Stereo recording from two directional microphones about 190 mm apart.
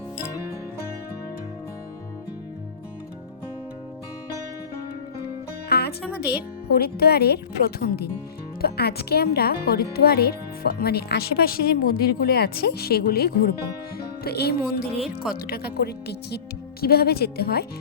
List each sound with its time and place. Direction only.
5.6 s music: 55° left (ahead or behind)
6.0 s speech: 5° right (ahead or behind)
6.2 s speech: 55° left (ahead or behind)